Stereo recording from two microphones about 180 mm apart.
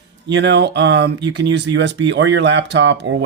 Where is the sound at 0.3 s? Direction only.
75° right (ahead or behind).